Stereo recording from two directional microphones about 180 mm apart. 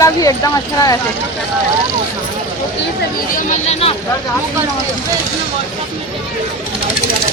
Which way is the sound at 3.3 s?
40° left (ahead or behind).